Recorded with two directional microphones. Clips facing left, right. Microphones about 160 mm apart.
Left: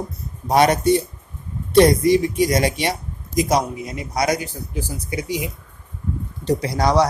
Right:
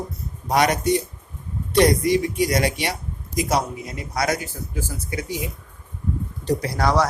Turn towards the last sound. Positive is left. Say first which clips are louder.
# left 3 dB
turn(degrees=20)  # may be behind; listen again after turning